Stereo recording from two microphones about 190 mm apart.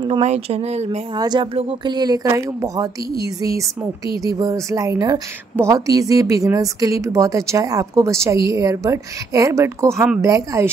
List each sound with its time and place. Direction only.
0.0 s speech: 30° right (ahead or behind)
1.1 s a woman's voice: 20° right (ahead or behind)